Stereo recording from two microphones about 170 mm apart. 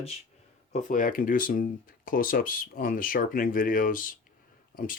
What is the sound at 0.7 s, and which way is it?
Speech, 50° left (ahead or behind).